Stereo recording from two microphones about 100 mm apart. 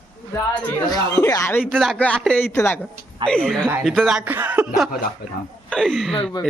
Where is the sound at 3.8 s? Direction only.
5° right (ahead or behind).